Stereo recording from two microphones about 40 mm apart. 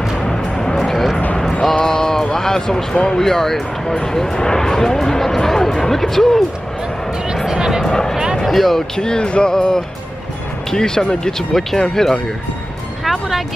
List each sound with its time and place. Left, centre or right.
0.2 s music: centre
1.5 s a sound: centre
2.3 s speech: centre
7.4 s music: centre
7.8 s music: centre
8.5 s speech: centre
8.9 s speech: centre
13.0 s music: centre